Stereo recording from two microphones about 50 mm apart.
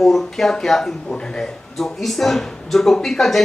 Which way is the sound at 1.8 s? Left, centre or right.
Centre.